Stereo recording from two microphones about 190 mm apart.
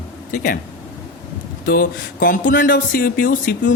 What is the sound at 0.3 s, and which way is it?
Speech, 45° left (ahead or behind).